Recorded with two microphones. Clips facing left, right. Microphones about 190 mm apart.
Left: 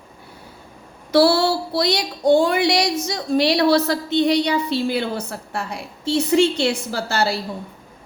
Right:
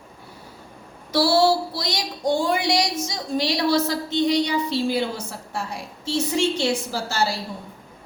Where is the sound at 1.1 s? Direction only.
60° left (ahead or behind).